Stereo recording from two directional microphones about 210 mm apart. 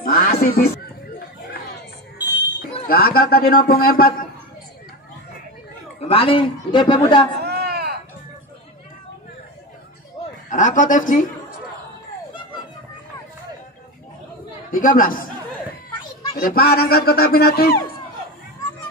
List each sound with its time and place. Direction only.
0.0 s a sound: 45° left (ahead or behind)
2.1 s fire alarm: 10° right (ahead or behind)
2.9 s speech: 45° left (ahead or behind)
5.9 s a man's voice: 25° left (ahead or behind)
7.4 s a sound: 50° right (ahead or behind)
10.2 s a sound: 30° left (ahead or behind)
10.5 s a man's voice: 35° left (ahead or behind)
14.7 s a man's voice: 40° left (ahead or behind)
16.3 s speech: 45° left (ahead or behind)